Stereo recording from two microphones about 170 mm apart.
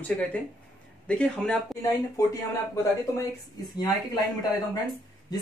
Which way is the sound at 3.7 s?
20° left (ahead or behind).